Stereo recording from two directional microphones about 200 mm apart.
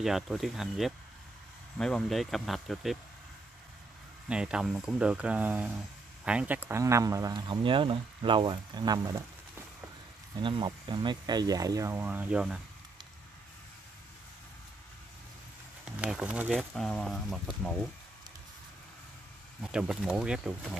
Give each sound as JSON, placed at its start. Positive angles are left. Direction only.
{"t": 0.0, "sound": "speech", "side_deg": 0}
{"t": 4.3, "sound": "speech", "side_deg": -5}
{"t": 10.4, "sound": "speech", "side_deg": -25}
{"t": 16.0, "sound": "speech", "side_deg": -5}
{"t": 19.6, "sound": "speech", "side_deg": 0}